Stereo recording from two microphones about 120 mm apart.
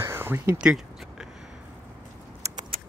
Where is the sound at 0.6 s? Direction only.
5° right (ahead or behind).